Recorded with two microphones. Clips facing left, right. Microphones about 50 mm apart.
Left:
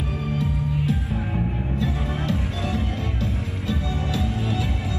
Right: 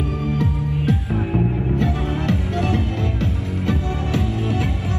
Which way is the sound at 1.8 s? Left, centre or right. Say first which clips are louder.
Right 4 dB; right.